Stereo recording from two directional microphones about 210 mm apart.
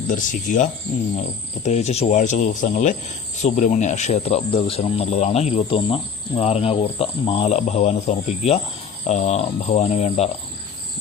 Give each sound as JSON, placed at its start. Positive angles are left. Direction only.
{"t": 0.1, "sound": "speech", "side_deg": 40}